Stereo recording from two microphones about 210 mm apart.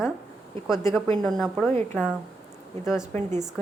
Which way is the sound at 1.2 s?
Centre (ahead or behind).